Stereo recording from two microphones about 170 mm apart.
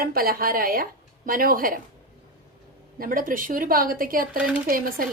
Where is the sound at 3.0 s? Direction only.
55° right (ahead or behind).